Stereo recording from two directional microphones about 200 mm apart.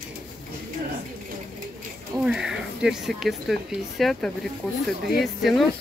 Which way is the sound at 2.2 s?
5° right (ahead or behind).